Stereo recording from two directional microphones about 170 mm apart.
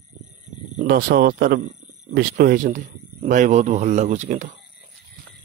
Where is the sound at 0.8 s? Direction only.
60° right (ahead or behind); by 4.5 s 45° right (ahead or behind).